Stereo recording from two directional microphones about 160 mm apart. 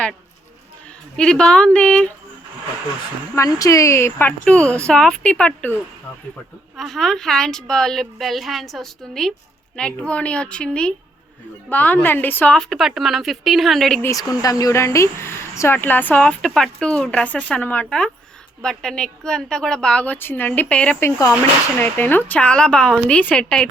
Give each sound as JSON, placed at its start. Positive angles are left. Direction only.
{"t": 1.1, "sound": "a woman's voice", "side_deg": 5}
{"t": 3.3, "sound": "speech", "side_deg": 20}
{"t": 6.7, "sound": "a woman's voice", "side_deg": 0}
{"t": 14.0, "sound": "a woman's voice", "side_deg": 20}